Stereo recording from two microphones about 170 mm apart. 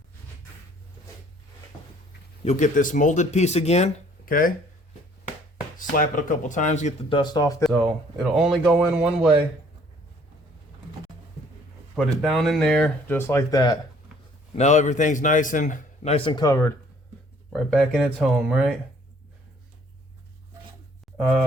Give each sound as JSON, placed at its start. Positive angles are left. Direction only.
{"t": 2.4, "sound": "speech", "side_deg": 40}
{"t": 4.3, "sound": "speech", "side_deg": 55}
{"t": 5.7, "sound": "a man's voice", "side_deg": 55}
{"t": 7.1, "sound": "speech", "side_deg": 25}
{"t": 8.2, "sound": "speech", "side_deg": 0}
{"t": 12.2, "sound": "speech", "side_deg": 0}
{"t": 14.5, "sound": "a man's voice", "side_deg": 40}
{"t": 16.1, "sound": "speech", "side_deg": 30}
{"t": 17.5, "sound": "speech", "side_deg": 5}